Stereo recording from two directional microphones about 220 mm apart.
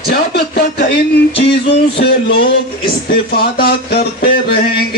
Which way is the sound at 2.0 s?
50° left (ahead or behind).